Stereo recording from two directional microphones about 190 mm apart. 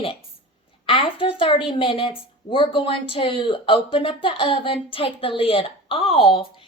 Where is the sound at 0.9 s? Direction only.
30° left (ahead or behind).